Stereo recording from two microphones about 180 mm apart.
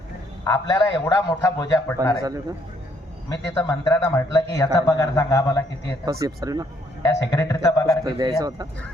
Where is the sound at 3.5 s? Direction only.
15° left (ahead or behind).